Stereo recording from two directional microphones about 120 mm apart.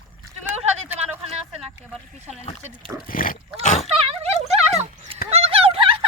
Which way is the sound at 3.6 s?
90° left.